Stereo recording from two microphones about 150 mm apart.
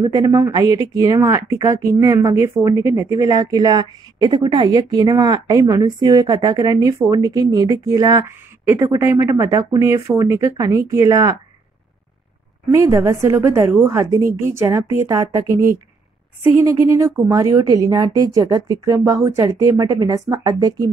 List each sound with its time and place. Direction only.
0.0 s speech: 25° right (ahead or behind)
12.7 s speech: 20° right (ahead or behind)
16.5 s speech: 20° right (ahead or behind)